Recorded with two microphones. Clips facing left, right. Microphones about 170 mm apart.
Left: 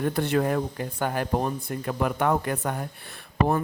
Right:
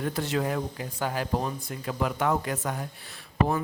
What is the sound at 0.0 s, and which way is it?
A man's voice, 55° left (ahead or behind).